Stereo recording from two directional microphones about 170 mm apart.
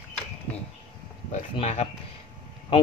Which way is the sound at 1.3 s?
40° left (ahead or behind).